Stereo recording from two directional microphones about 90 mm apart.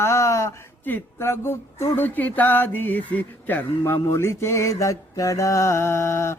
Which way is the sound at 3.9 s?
30° left (ahead or behind).